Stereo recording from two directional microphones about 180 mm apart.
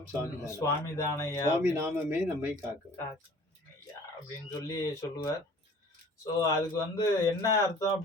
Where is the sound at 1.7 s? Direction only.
15° right (ahead or behind).